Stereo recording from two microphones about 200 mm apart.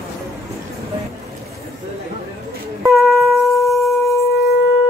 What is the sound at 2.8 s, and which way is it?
Music, centre (ahead or behind).